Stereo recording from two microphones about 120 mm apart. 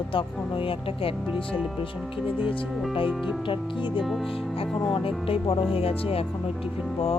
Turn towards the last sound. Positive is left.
turn(degrees=55)  # may be behind; listen again after turning